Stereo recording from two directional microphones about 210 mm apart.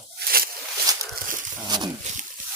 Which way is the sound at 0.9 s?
15° right (ahead or behind).